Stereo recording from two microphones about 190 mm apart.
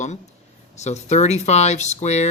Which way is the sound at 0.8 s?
35° left (ahead or behind).